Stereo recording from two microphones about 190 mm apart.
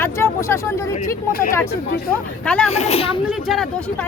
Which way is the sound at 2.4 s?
5° left (ahead or behind).